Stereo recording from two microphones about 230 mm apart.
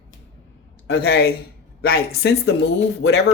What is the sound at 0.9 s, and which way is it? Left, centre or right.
Speech, left.